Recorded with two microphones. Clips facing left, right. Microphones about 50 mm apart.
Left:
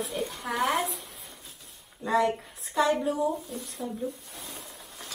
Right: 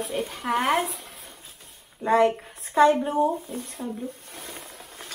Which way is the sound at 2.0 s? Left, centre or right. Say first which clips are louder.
Right 5 dB; right.